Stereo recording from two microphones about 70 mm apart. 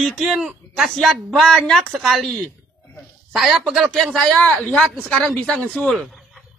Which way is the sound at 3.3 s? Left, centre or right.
Centre.